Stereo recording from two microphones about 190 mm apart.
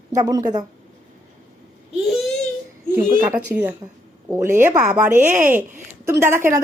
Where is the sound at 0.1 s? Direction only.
20° right (ahead or behind).